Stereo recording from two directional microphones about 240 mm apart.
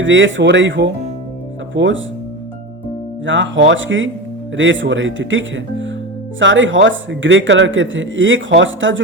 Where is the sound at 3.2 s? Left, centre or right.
Right.